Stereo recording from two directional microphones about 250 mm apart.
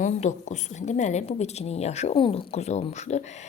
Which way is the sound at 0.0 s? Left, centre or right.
Left.